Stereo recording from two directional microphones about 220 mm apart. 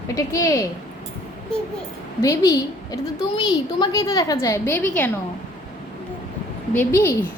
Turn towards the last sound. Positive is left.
turn(degrees=10)  # may be behind; listen again after turning